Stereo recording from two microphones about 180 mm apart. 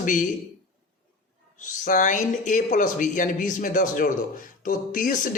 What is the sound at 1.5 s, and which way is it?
Speech, 45° left (ahead or behind).